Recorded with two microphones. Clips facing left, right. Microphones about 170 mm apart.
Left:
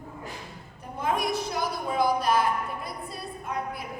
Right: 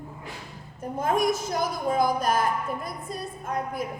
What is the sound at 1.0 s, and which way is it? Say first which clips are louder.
A woman's voice: right 3 dB; 45° right (ahead or behind).